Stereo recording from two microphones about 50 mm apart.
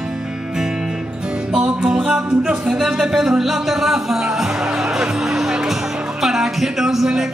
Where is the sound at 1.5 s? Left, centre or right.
Centre.